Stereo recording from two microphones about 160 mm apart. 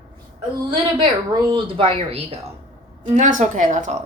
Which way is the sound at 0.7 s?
30° right (ahead or behind).